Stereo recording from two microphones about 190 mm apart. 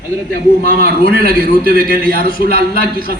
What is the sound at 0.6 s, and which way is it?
A man's voice, 50° right (ahead or behind).